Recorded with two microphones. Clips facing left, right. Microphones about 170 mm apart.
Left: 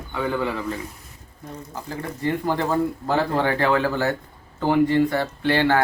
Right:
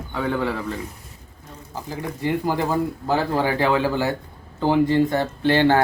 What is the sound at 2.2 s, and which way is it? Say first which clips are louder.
Speech: even; 10° right (ahead or behind).